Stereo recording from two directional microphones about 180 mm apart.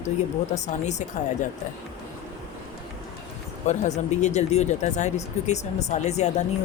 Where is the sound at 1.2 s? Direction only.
40° left (ahead or behind).